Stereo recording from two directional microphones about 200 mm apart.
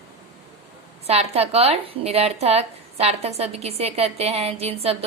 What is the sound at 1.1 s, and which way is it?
A woman's voice, 30° right (ahead or behind).